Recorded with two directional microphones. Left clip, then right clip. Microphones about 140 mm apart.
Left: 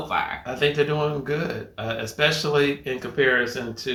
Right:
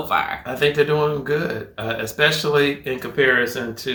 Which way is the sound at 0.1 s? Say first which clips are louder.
Right 4 dB; 25° right (ahead or behind).